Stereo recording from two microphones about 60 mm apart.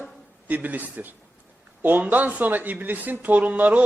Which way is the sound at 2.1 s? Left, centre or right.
Right.